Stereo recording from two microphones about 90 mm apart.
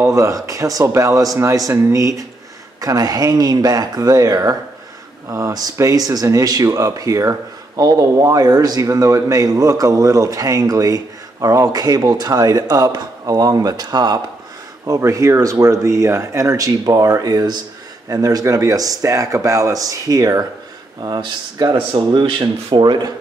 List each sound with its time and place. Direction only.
0.0 s speech: 35° right (ahead or behind)
14.9 s speech: 35° right (ahead or behind)
21.0 s speech: 50° right (ahead or behind); by 22.8 s 70° right (ahead or behind)
22.8 s speech: 50° right (ahead or behind)